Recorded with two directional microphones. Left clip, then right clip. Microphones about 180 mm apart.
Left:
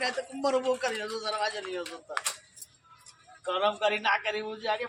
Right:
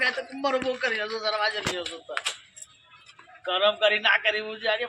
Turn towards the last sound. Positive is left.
turn(degrees=20)  # may be behind; listen again after turning